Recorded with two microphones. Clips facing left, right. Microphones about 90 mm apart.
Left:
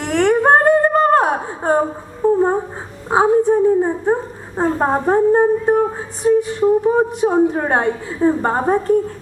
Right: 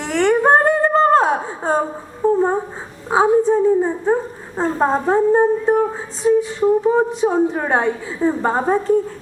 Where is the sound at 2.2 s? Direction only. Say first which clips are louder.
Left 1 dB; 15° left (ahead or behind).